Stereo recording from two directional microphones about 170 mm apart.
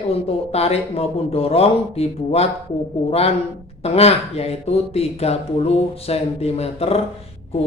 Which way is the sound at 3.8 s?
35° left (ahead or behind).